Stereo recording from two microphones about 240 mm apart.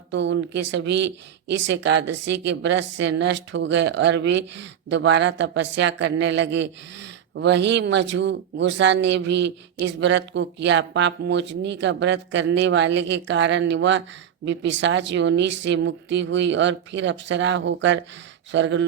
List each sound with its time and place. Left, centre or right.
0.1 s speech: right